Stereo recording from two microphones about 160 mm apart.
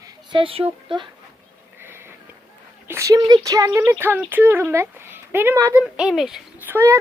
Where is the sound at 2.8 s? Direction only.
20° right (ahead or behind).